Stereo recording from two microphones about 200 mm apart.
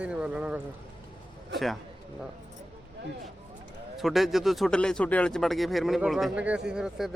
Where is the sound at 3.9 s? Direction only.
Centre (ahead or behind).